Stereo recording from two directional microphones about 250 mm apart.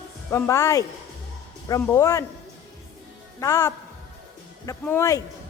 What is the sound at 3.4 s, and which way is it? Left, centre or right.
A woman's voice, centre.